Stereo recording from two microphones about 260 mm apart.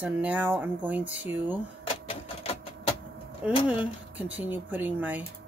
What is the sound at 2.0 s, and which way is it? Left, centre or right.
Typewriter, left.